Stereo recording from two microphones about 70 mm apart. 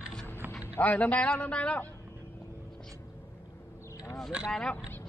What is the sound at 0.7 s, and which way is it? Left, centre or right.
A man's voice, left.